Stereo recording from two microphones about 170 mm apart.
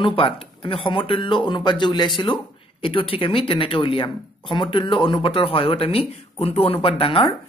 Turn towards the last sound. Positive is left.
turn(degrees=30)  # may be behind; listen again after turning